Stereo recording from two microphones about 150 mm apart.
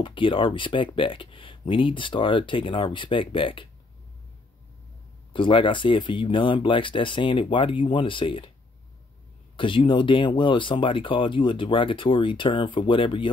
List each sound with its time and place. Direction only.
0.0 s speech: 35° left (ahead or behind)
5.3 s speech: 35° left (ahead or behind)
9.6 s speech: 35° left (ahead or behind)